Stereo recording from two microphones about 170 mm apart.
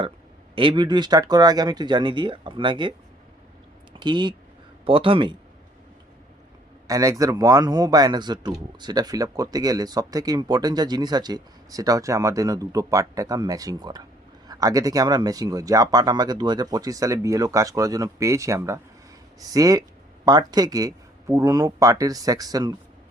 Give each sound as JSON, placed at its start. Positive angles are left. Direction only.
{"t": 0.5, "sound": "a man's voice", "side_deg": -30}
{"t": 3.9, "sound": "speech", "side_deg": -25}
{"t": 6.8, "sound": "a man's voice", "side_deg": -20}